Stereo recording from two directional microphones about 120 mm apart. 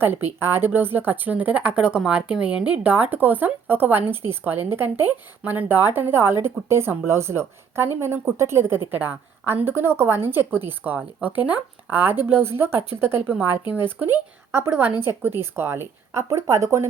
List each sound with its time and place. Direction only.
0.3 s speech: 20° right (ahead or behind)